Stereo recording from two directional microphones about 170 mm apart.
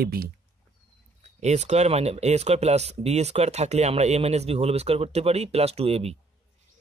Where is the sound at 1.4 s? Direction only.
40° right (ahead or behind).